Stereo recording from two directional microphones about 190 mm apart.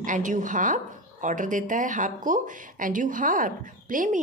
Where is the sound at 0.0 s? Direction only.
40° right (ahead or behind).